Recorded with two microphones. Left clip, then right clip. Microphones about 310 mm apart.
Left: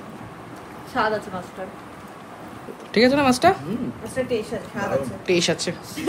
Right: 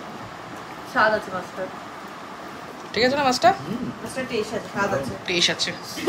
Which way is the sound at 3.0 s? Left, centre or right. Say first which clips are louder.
Left 2 dB; left.